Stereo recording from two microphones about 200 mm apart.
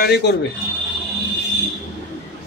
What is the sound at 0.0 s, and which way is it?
Speech, 55° left (ahead or behind).